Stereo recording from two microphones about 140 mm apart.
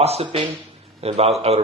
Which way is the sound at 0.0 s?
45° right (ahead or behind).